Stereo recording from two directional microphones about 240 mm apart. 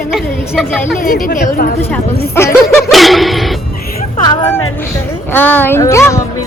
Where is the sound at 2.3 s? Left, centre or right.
Centre.